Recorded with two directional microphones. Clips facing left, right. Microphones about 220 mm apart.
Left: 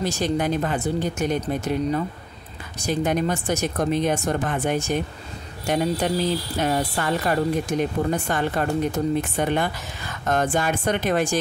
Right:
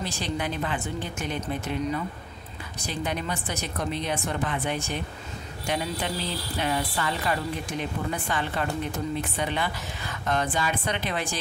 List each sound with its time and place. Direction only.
0.0 s speech: 45° left (ahead or behind)